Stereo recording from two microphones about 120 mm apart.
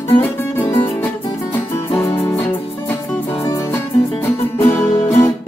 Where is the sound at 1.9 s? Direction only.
25° left (ahead or behind).